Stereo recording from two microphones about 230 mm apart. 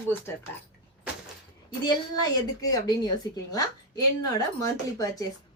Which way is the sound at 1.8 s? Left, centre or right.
Centre.